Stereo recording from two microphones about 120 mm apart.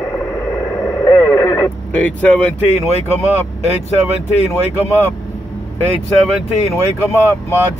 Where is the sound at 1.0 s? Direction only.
20° left (ahead or behind).